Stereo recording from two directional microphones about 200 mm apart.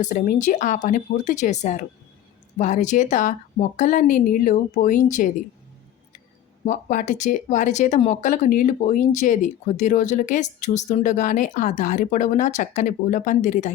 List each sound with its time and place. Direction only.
0.0 s speech: 40° left (ahead or behind)
6.7 s speech: 40° left (ahead or behind)